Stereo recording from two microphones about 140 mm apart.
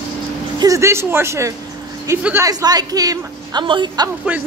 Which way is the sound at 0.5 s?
25° right (ahead or behind).